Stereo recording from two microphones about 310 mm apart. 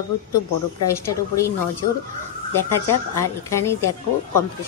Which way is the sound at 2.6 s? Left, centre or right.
Centre.